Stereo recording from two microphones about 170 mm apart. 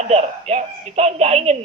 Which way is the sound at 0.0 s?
40° right (ahead or behind).